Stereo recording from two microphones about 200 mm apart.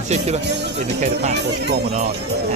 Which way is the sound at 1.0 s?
35° right (ahead or behind).